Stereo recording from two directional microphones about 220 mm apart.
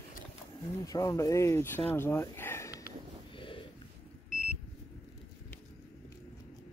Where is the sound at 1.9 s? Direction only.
10° left (ahead or behind).